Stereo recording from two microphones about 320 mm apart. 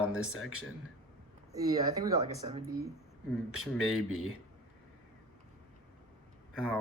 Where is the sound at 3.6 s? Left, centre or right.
Centre.